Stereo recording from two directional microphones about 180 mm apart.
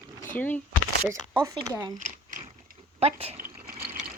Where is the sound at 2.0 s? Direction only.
45° right (ahead or behind).